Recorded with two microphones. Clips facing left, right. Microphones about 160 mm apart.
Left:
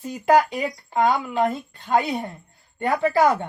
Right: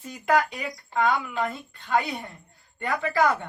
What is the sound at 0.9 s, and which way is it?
A woman's voice, 30° left (ahead or behind).